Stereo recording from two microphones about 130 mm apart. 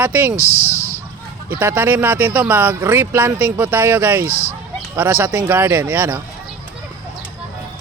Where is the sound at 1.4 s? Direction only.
10° right (ahead or behind).